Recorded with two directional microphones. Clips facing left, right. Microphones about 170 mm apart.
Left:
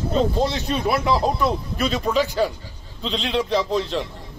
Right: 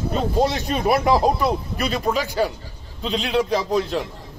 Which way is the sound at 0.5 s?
45° right (ahead or behind).